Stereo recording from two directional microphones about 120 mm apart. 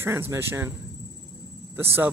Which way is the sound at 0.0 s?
20° right (ahead or behind).